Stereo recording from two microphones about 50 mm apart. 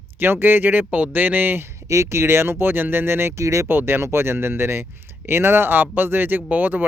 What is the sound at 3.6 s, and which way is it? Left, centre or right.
Speech, right.